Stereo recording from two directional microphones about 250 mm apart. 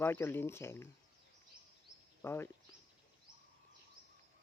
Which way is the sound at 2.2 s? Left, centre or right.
Centre.